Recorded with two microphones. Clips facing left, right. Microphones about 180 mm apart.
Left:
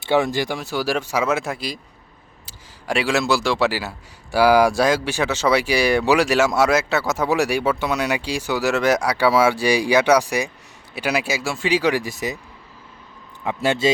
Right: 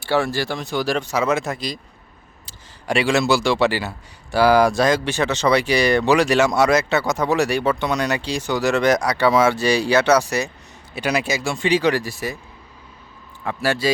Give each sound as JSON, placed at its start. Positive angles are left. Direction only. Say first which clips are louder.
{"t": 0.0, "sound": "speech", "louder": "left 1 dB", "side_deg": 20}
{"t": 13.4, "sound": "a man's voice", "louder": "left 2 dB", "side_deg": 20}